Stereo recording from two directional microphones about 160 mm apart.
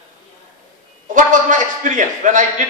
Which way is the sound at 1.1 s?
55° right (ahead or behind).